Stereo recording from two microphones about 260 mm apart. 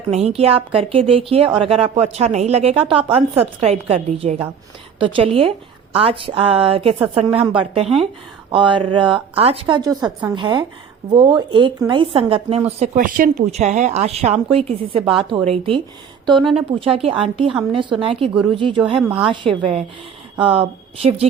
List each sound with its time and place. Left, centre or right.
0.1 s speech: right
16.4 s a woman's voice: centre
16.8 s speech: right
18.9 s a woman's voice: centre
20.5 s speech: right